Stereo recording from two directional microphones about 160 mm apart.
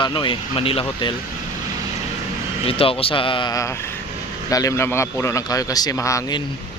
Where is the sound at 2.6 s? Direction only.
35° left (ahead or behind); by 6.4 s 20° left (ahead or behind).